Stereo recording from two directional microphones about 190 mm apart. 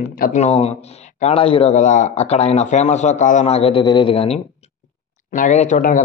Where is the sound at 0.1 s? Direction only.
45° left (ahead or behind).